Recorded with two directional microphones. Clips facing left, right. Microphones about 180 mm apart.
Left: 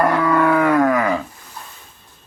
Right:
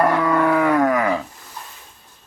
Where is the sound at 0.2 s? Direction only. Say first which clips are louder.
Left 1 dB; 20° right (ahead or behind).